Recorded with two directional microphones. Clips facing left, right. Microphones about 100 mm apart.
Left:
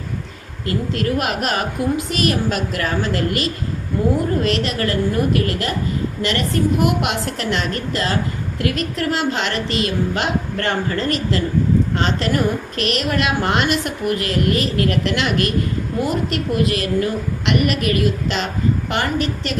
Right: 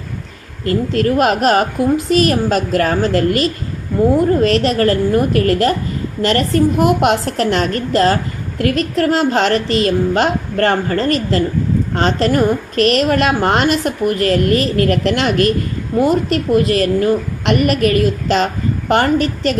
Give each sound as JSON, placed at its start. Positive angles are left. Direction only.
{"t": 0.6, "sound": "a woman's voice", "side_deg": -40}